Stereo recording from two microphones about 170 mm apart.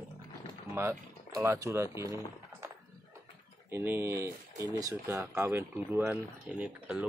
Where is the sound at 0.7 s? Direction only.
15° right (ahead or behind).